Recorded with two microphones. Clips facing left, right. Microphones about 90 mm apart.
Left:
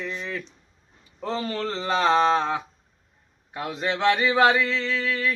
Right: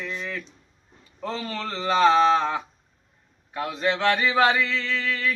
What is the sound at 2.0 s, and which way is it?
Speech, 20° left (ahead or behind).